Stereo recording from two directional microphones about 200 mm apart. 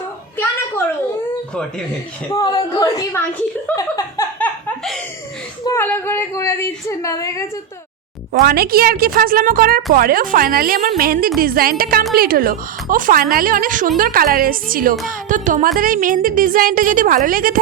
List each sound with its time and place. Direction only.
2.3 s speech: 20° left (ahead or behind)
4.4 s laughter: 5° left (ahead or behind)
5.6 s a woman's voice: 10° left (ahead or behind)
8.3 s a woman's voice: 50° right (ahead or behind)